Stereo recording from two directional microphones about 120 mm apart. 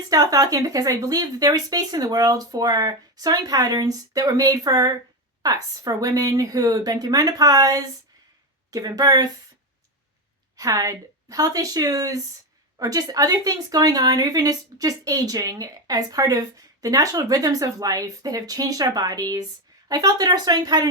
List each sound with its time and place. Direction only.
0.1 s speech: 30° right (ahead or behind)
10.6 s speech: 30° right (ahead or behind)